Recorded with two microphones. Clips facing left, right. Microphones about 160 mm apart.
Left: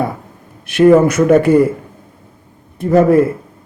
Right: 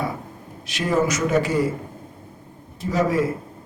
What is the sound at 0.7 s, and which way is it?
A man's voice, 55° left (ahead or behind).